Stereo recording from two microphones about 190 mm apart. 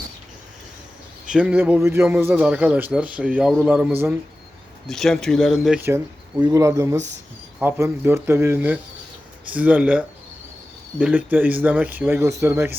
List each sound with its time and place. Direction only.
1.3 s a man's voice: 5° right (ahead or behind)
4.9 s speech: centre (ahead or behind)
6.4 s a man's voice: 15° right (ahead or behind)